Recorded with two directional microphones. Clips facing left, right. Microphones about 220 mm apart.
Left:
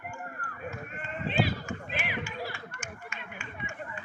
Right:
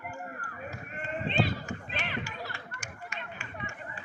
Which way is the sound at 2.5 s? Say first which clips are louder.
Left 2 dB; 40° right (ahead or behind).